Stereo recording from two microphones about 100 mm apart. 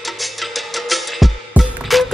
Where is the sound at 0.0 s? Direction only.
Centre (ahead or behind).